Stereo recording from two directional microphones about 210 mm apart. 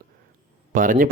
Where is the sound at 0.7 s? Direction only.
40° right (ahead or behind).